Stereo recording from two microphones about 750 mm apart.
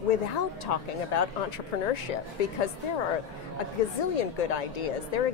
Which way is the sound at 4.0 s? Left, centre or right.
Left.